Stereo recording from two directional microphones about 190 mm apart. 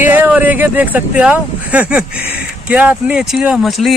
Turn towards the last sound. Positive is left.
turn(degrees=0)  # may be behind; listen again after turning